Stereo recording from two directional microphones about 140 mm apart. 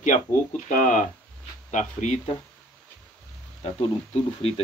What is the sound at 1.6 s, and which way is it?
Speech, 60° left (ahead or behind).